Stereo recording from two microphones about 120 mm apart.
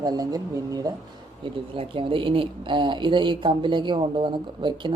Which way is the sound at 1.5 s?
45° right (ahead or behind).